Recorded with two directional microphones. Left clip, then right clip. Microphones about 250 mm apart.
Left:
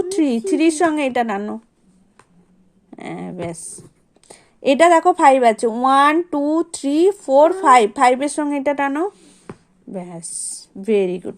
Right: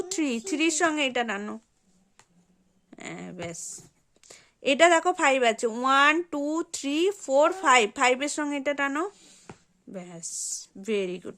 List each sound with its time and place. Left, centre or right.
0.0 s a woman's voice: centre
2.9 s a woman's voice: centre